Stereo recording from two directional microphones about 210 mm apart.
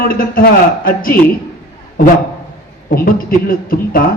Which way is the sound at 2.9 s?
45° left (ahead or behind).